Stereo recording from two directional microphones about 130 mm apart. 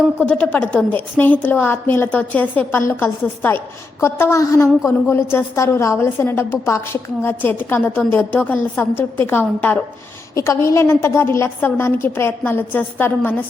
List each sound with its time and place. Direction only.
0.2 s a woman's voice: 10° left (ahead or behind)